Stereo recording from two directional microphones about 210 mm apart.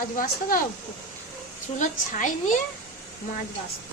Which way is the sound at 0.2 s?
40° left (ahead or behind).